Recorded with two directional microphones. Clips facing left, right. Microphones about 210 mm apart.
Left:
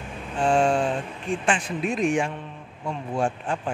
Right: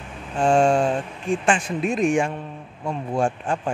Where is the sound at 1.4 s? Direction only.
45° right (ahead or behind).